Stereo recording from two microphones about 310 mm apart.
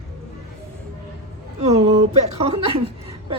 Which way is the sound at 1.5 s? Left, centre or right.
Centre.